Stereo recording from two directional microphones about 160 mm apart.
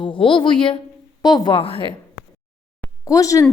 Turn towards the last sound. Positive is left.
turn(degrees=20)  # may be behind; listen again after turning